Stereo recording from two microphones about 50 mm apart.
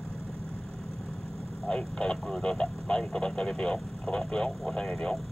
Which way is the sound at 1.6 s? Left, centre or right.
Centre.